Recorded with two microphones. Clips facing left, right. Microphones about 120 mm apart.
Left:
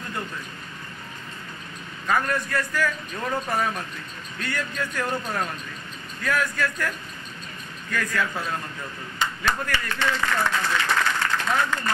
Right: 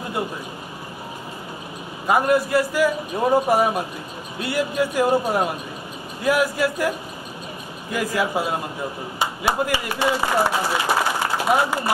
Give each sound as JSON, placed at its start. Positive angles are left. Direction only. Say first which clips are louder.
{"t": 0.0, "sound": "a sound", "louder": "right 6 dB", "side_deg": -15}
{"t": 2.0, "sound": "speech", "louder": "right 7 dB", "side_deg": -15}
{"t": 10.7, "sound": "applause", "louder": "right 3 dB", "side_deg": -15}